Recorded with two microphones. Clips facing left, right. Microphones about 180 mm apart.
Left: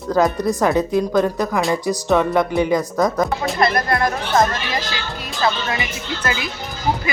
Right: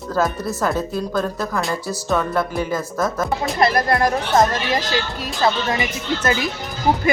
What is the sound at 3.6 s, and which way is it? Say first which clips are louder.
Speech: right 1 dB; 35° right (ahead or behind).